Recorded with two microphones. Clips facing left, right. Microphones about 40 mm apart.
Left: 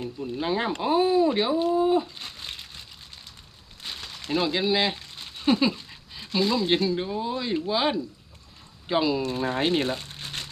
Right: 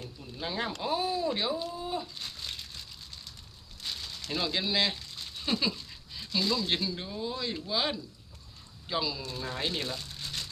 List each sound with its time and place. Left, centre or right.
0.0 s speech: left
4.0 s a sound: left
4.3 s speech: left